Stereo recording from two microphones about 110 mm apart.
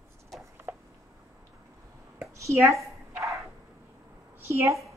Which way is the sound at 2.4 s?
30° right (ahead or behind).